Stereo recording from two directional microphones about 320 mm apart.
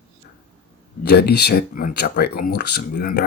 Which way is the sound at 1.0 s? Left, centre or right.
Left.